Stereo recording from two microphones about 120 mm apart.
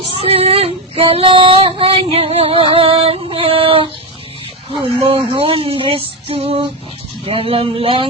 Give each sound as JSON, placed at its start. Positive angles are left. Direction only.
{"t": 0.2, "sound": "child singing", "side_deg": -55}